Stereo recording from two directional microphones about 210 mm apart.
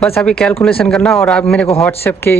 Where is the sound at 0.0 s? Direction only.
5° left (ahead or behind).